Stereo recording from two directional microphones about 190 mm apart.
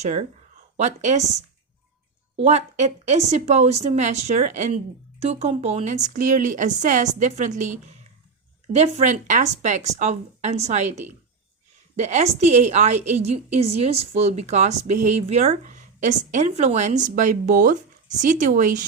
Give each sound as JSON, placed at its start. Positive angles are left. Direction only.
{"t": 0.0, "sound": "a woman's voice", "side_deg": -35}